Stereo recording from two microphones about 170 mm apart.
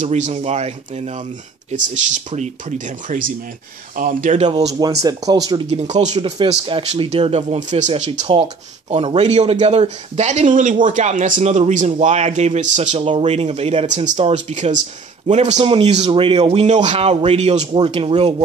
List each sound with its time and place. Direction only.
0.0 s a man's voice: 45° right (ahead or behind)
3.9 s a man's voice: 50° right (ahead or behind)
4.5 s speech: 25° right (ahead or behind)
5.7 s a man's voice: 40° right (ahead or behind)